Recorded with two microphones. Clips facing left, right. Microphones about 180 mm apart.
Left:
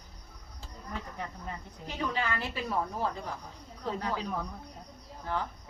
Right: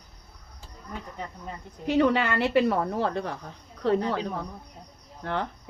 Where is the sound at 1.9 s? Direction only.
70° right (ahead or behind).